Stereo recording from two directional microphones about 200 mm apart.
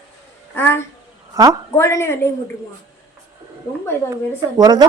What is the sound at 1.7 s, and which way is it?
Speech, 15° left (ahead or behind).